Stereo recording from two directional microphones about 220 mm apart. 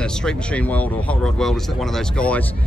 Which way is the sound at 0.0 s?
5° left (ahead or behind).